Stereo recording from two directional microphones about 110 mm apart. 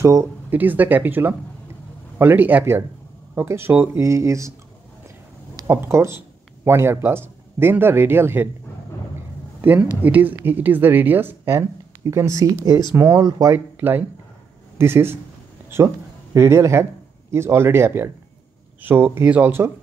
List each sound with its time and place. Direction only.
0.0 s a man's voice: 25° right (ahead or behind)
5.7 s a man's voice: 25° right (ahead or behind)
9.6 s a man's voice: 15° right (ahead or behind)
13.2 s speech: 35° right (ahead or behind)
13.7 s a man's voice: 20° right (ahead or behind)